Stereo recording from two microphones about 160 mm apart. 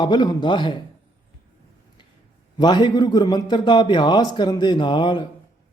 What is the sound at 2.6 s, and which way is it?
A man's voice, 25° left (ahead or behind).